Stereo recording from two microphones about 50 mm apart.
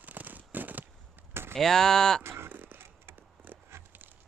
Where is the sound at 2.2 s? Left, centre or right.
Right.